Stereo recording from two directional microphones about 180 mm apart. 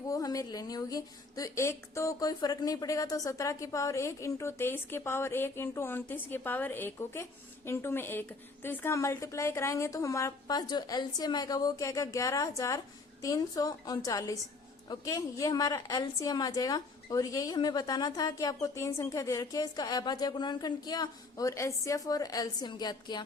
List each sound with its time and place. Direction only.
0.1 s a woman's voice: 20° left (ahead or behind)